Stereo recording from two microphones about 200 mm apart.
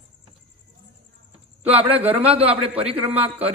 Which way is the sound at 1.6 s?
30° right (ahead or behind).